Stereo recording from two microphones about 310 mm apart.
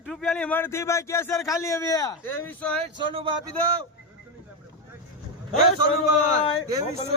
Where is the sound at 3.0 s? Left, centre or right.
Centre.